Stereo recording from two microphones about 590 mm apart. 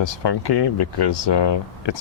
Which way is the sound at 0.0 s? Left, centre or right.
Left.